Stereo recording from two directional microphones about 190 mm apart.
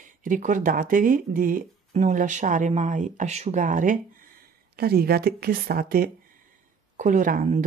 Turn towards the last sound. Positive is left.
turn(degrees=-45)  # may be behind; listen again after turning